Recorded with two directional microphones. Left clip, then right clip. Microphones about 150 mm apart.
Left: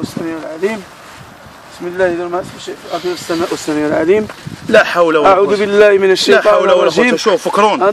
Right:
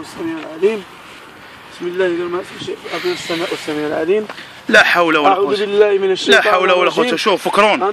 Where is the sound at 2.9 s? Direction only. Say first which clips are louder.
Left 2 dB; 10° left (ahead or behind).